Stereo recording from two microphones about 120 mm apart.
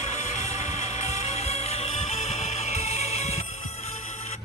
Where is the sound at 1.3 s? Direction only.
60° left (ahead or behind).